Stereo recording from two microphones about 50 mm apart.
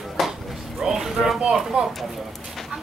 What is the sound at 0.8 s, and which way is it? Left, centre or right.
Speech, centre.